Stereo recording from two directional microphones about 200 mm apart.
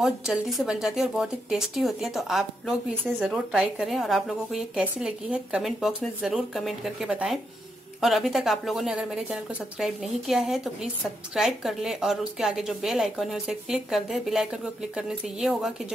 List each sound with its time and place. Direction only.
0.0 s speech: centre (ahead or behind)